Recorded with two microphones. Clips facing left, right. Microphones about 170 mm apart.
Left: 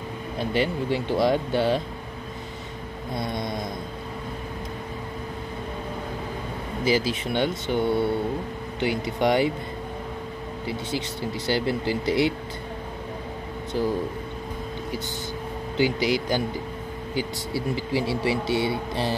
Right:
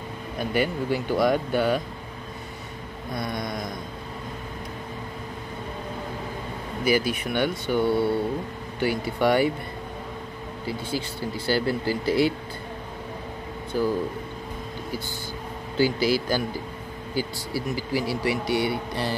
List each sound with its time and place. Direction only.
0.4 s speech: 25° left (ahead or behind)
3.1 s speech: 25° left (ahead or behind)
6.8 s speech: 25° left (ahead or behind)
10.7 s speech: 20° left (ahead or behind)
13.7 s speech: 25° left (ahead or behind)
15.8 s speech: 20° left (ahead or behind)